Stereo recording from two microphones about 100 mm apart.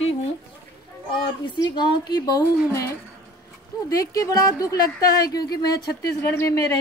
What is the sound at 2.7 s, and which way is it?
A woman's voice, 30° left (ahead or behind).